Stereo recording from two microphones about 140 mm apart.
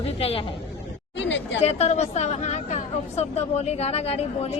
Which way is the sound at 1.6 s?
50° left (ahead or behind).